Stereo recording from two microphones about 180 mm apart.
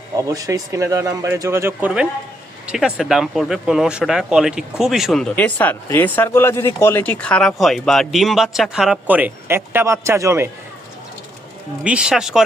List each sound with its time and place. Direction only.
0.2 s speech: 20° right (ahead or behind)
11.8 s speech: 5° right (ahead or behind)